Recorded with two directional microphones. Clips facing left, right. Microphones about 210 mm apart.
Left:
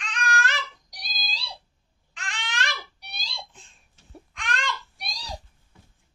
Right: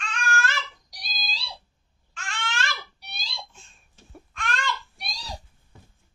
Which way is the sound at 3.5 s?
15° left (ahead or behind).